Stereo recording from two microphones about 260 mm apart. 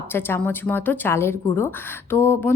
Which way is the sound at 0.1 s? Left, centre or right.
Centre.